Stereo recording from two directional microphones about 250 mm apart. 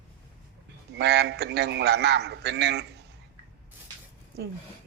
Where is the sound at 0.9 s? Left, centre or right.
Right.